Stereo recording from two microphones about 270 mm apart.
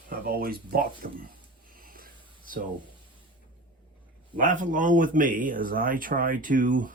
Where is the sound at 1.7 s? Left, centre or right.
Right.